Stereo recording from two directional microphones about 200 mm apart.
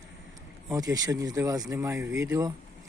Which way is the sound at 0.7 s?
20° right (ahead or behind).